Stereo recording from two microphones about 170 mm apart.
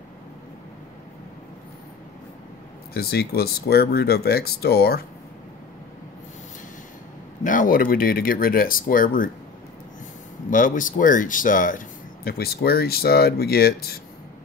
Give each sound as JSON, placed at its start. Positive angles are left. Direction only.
{"t": 2.9, "sound": "speech", "side_deg": 65}
{"t": 7.4, "sound": "speech", "side_deg": 50}
{"t": 10.5, "sound": "speech", "side_deg": 50}
{"t": 12.3, "sound": "speech", "side_deg": 65}